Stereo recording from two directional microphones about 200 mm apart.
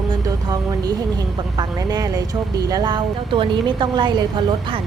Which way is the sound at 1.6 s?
20° right (ahead or behind).